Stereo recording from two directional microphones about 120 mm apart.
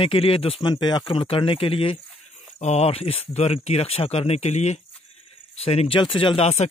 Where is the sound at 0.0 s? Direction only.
50° left (ahead or behind).